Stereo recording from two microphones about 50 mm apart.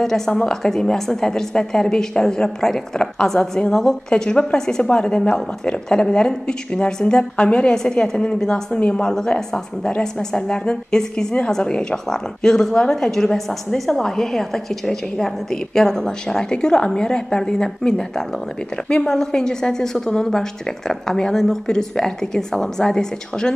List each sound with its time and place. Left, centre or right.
0.0 s a woman's voice: centre